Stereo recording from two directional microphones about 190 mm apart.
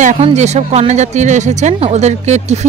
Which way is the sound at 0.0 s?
40° right (ahead or behind).